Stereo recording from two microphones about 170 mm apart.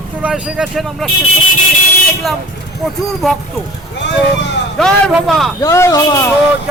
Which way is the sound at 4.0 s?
90° left.